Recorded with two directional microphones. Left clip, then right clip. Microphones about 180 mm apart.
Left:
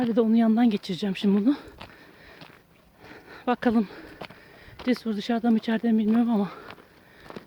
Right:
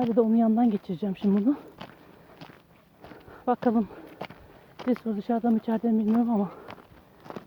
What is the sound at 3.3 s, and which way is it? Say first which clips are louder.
Speech: left 1 dB; 30° left (ahead or behind).